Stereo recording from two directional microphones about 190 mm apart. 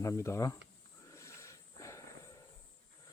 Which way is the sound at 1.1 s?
15° left (ahead or behind).